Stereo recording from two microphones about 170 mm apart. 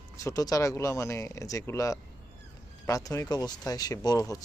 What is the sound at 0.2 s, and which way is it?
Speech, 20° left (ahead or behind).